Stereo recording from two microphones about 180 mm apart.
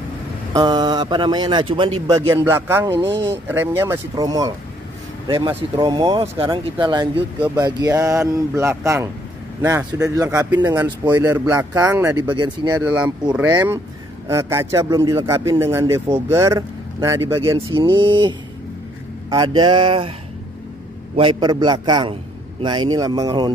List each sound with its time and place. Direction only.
0.5 s a man's voice: 20° right (ahead or behind)
3.1 s speech: 80° right
3.4 s speech: 10° right (ahead or behind)
5.8 s a man's voice: 25° right (ahead or behind)
12.8 s speech: 5° right (ahead or behind)
13.5 s a man's voice: 20° right (ahead or behind)
17.7 s a man's voice: 25° right (ahead or behind)
19.3 s a man's voice: 25° right (ahead or behind)
21.2 s a man's voice: 25° right (ahead or behind)